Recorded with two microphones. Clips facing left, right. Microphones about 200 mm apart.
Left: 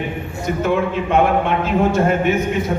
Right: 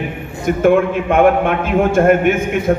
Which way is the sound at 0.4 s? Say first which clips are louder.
Right 6 dB; 55° right (ahead or behind).